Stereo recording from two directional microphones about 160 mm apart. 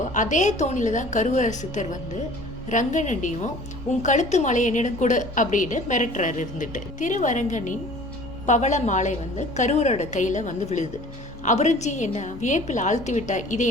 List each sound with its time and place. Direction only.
0.1 s a woman's voice: 50° left (ahead or behind)